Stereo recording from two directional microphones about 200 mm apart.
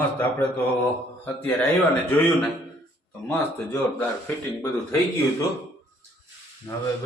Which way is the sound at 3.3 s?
10° left (ahead or behind).